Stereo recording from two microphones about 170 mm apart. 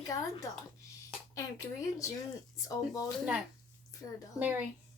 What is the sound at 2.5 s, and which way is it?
A woman's voice, 20° left (ahead or behind).